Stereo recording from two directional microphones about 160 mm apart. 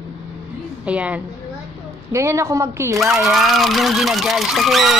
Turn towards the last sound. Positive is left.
turn(degrees=0)  # may be behind; listen again after turning